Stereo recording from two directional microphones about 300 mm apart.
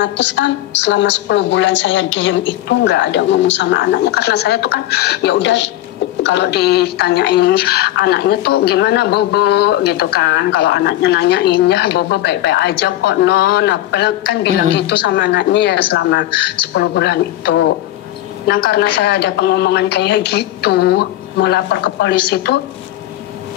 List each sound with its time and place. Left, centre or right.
0.0 s a woman's voice: left